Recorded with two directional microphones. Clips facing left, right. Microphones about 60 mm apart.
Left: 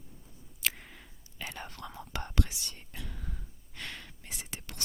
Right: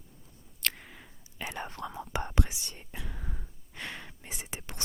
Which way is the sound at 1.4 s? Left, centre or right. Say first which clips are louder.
Right 5 dB; centre.